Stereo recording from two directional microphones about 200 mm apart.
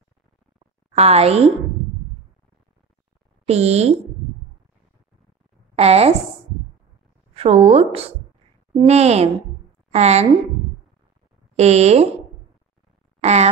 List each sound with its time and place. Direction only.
0.9 s a woman's voice: 30° right (ahead or behind)
3.4 s a woman's voice: 30° right (ahead or behind)
5.8 s a woman's voice: 30° right (ahead or behind)
7.3 s a woman's voice: 30° right (ahead or behind)
11.5 s a woman's voice: 30° right (ahead or behind)
13.2 s speech: 35° right (ahead or behind)